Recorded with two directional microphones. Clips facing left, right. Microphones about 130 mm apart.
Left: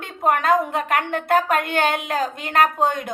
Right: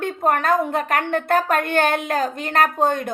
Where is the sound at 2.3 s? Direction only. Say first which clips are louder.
Left 3 dB; 15° left (ahead or behind).